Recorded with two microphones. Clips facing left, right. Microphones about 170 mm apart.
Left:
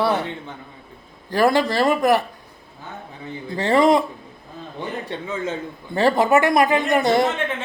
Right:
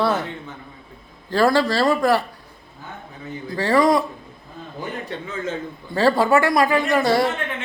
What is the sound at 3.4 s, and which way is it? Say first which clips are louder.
Speech: left 1 dB; 20° left (ahead or behind).